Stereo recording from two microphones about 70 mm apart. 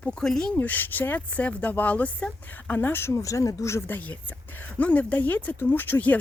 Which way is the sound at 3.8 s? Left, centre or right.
Left.